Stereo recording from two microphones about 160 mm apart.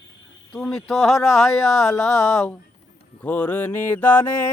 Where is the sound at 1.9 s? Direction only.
15° left (ahead or behind).